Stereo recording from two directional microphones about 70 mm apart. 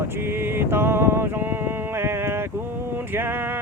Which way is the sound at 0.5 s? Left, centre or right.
Right.